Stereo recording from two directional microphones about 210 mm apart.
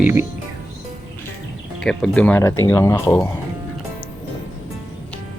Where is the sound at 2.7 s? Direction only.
15° left (ahead or behind).